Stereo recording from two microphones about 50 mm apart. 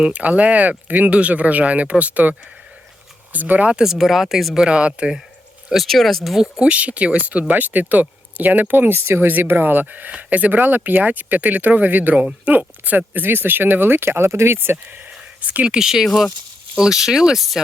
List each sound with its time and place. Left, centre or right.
0.1 s speech: right
3.3 s speech: right
3.9 s speech: centre
4.5 s speech: centre
5.6 s speech: centre
6.6 s speech: right
8.9 s speech: right
12.1 s speech: right
13.2 s speech: right
15.4 s speech: right
15.7 s speech: centre